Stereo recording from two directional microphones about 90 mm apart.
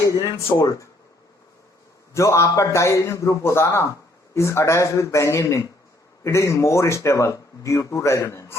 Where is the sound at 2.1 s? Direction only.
35° left (ahead or behind).